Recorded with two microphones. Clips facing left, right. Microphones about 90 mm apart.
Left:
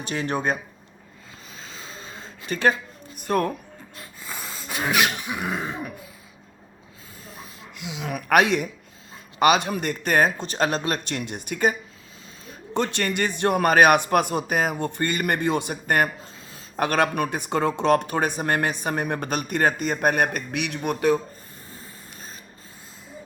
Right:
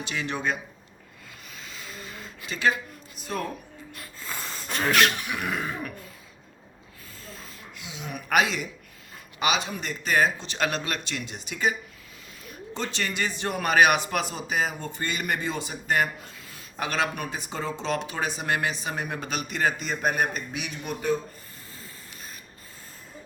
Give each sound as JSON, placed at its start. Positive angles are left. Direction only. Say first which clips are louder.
{"t": 0.0, "sound": "speech", "louder": "left 4 dB", "side_deg": 45}
{"t": 1.5, "sound": "wheeze", "louder": "left 1 dB", "side_deg": 30}
{"t": 2.5, "sound": "speech", "louder": "left 4 dB", "side_deg": 50}
{"t": 4.2, "sound": "sneeze", "louder": "even", "side_deg": 5}
{"t": 5.4, "sound": "throat clearing", "louder": "left 3 dB", "side_deg": 25}
{"t": 7.3, "sound": "snort", "louder": "left 2 dB", "side_deg": 20}
{"t": 7.9, "sound": "speech", "louder": "left 6 dB", "side_deg": 80}
{"t": 8.3, "sound": "speech", "louder": "left 5 dB", "side_deg": 55}
{"t": 12.7, "sound": "speech", "louder": "left 6 dB", "side_deg": 55}